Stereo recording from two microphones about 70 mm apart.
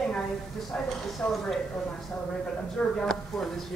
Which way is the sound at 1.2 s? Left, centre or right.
Centre.